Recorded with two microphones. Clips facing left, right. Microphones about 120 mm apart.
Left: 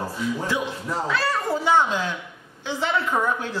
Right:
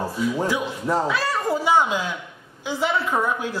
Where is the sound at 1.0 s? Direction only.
15° right (ahead or behind).